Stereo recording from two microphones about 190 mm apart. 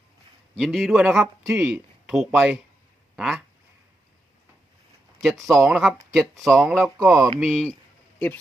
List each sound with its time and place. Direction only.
0.5 s speech: centre (ahead or behind)
5.2 s speech: centre (ahead or behind)
7.1 s speech: 20° right (ahead or behind)
7.3 s speech: centre (ahead or behind)